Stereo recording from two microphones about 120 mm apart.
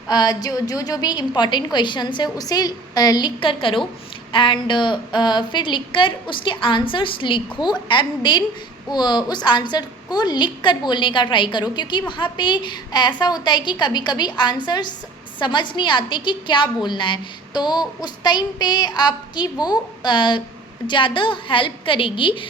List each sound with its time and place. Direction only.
0.1 s a woman's voice: 35° left (ahead or behind)